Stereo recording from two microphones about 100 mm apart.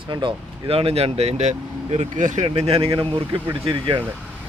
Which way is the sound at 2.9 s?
50° right (ahead or behind).